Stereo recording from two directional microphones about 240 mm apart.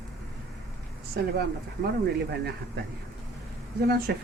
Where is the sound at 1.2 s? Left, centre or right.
Right.